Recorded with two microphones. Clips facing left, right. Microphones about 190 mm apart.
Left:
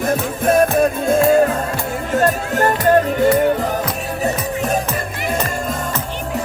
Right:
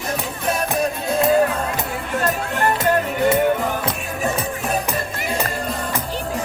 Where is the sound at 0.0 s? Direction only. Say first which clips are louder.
Left 7 dB; 50° left (ahead or behind).